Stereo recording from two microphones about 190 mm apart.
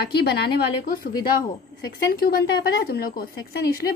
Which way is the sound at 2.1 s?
50° left (ahead or behind).